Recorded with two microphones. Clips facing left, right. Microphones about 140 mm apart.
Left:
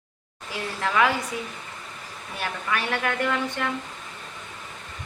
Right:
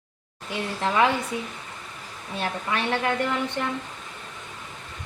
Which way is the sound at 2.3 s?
25° right (ahead or behind).